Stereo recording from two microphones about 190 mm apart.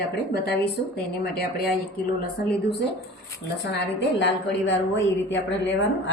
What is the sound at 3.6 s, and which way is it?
A woman's voice, 65° left (ahead or behind).